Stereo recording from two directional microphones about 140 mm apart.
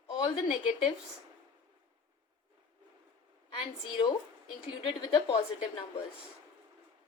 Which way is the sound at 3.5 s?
40° left (ahead or behind).